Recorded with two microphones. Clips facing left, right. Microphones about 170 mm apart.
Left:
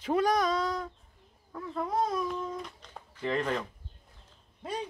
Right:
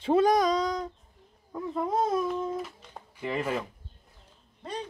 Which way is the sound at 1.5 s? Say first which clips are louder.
Right 3 dB; 20° right (ahead or behind).